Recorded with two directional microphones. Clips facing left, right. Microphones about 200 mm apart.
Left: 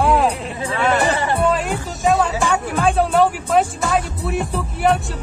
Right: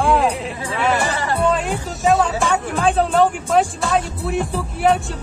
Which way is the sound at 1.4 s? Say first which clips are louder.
Even; centre (ahead or behind).